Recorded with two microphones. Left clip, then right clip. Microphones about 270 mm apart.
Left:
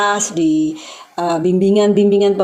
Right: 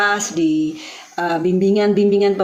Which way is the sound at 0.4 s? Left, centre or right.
Centre.